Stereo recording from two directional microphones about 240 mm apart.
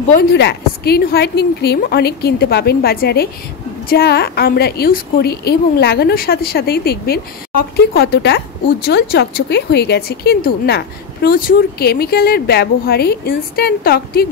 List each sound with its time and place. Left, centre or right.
0.1 s speech: left